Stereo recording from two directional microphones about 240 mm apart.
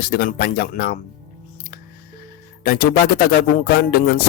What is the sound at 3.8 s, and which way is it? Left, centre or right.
Speech, left.